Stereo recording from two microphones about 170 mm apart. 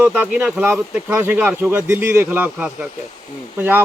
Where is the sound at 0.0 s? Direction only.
10° right (ahead or behind).